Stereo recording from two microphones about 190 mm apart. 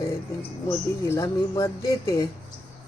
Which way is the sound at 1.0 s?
15° left (ahead or behind).